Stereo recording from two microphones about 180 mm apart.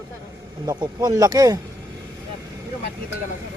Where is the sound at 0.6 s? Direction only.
20° right (ahead or behind).